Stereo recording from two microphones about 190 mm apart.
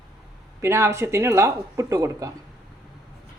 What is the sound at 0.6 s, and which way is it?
Speech, 15° right (ahead or behind).